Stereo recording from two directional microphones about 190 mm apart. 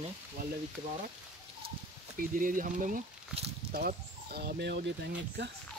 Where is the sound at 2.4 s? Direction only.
45° right (ahead or behind).